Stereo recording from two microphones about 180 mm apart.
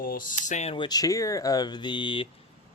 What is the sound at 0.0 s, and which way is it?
Speech, 50° left (ahead or behind).